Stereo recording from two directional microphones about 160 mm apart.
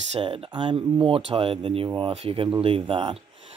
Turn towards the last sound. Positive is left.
turn(degrees=-35)  # may be behind; listen again after turning